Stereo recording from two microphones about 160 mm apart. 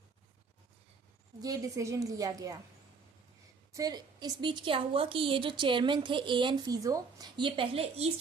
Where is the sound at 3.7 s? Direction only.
25° right (ahead or behind); by 8.1 s 40° right (ahead or behind).